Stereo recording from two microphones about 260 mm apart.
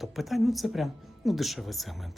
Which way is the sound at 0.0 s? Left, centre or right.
Centre.